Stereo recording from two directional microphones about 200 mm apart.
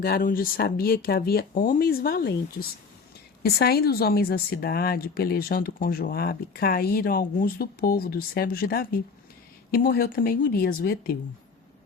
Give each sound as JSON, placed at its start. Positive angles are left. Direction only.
{"t": 0.0, "sound": "a woman's voice", "side_deg": 45}